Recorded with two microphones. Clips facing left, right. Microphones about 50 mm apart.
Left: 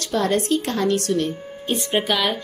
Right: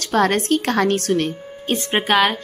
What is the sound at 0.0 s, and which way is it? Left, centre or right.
Speech, right.